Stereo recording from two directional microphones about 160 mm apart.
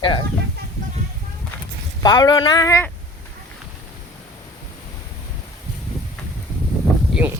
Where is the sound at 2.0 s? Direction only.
25° left (ahead or behind).